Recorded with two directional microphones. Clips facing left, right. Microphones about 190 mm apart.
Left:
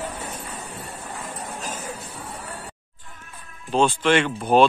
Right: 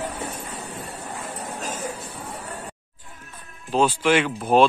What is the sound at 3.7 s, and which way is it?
Speech, 5° right (ahead or behind).